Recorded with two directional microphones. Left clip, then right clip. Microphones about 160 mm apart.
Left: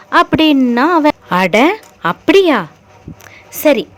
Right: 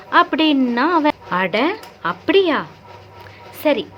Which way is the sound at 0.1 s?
35° left (ahead or behind).